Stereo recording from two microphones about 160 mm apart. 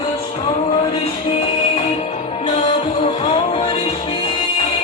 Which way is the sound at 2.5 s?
45° left (ahead or behind).